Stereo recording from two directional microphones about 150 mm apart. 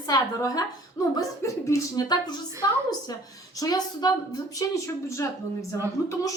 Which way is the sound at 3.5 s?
25° left (ahead or behind).